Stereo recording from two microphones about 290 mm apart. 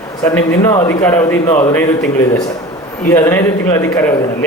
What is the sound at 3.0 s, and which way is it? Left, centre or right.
A man's voice, centre.